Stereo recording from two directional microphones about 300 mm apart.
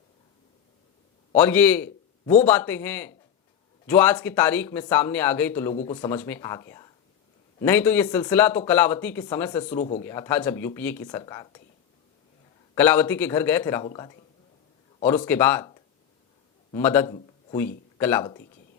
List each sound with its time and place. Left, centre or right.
1.4 s a man's voice: centre
5.7 s speech: centre
9.7 s speech: left
10.0 s speech: centre
12.7 s a man's voice: centre